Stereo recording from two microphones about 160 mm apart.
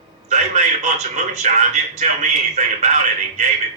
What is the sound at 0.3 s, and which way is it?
A man's voice, 45° right (ahead or behind).